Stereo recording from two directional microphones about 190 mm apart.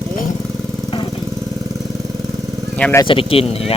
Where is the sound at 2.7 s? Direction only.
5° left (ahead or behind).